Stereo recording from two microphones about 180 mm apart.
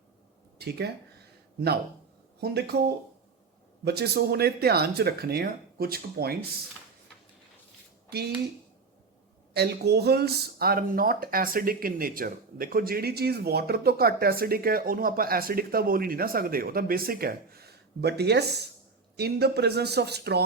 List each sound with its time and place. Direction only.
1.5 s speech: 60° right (ahead or behind)
3.8 s speech: 65° right (ahead or behind)
9.6 s speech: 65° right (ahead or behind)